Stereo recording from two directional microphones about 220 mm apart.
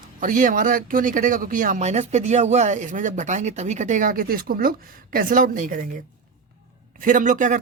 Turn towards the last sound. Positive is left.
turn(degrees=-35)  # may be behind; listen again after turning